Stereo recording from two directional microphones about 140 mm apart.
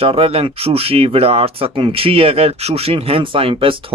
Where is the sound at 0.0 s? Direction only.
45° right (ahead or behind).